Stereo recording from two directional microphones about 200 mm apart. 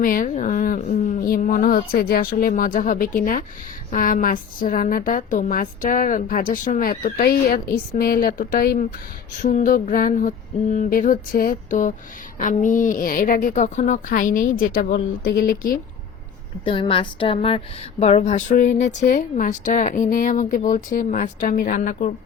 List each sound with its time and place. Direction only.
0.0 s a woman's voice: 45° left (ahead or behind)
16.6 s speech: 25° left (ahead or behind)